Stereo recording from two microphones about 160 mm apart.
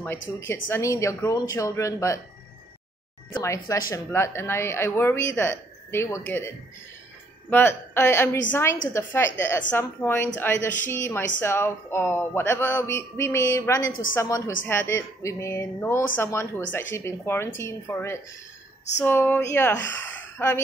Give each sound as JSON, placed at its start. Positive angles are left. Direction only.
{"t": 0.4, "sound": "a woman's voice", "side_deg": 15}
{"t": 3.4, "sound": "a woman's voice", "side_deg": 20}